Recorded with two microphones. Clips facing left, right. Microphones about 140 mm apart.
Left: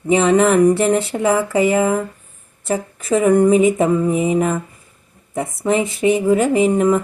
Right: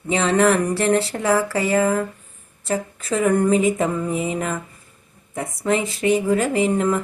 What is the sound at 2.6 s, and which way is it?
A woman's voice, 20° left (ahead or behind).